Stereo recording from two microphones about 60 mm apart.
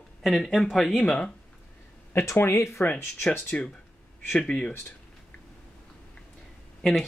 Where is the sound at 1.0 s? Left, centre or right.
Centre.